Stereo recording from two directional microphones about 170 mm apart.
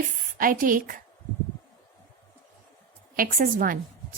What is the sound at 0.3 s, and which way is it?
Speech, 55° right (ahead or behind).